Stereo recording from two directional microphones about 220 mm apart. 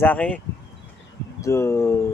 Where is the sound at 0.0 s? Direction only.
5° left (ahead or behind).